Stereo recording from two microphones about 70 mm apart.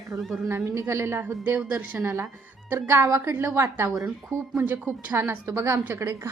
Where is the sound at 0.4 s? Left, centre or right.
Right.